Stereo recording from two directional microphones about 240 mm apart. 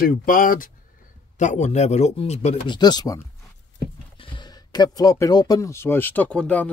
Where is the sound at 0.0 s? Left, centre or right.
Left; by 3.2 s centre.